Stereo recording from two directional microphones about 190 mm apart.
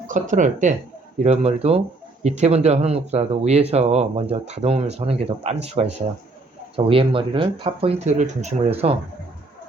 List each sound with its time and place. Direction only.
0.1 s speech: 40° right (ahead or behind)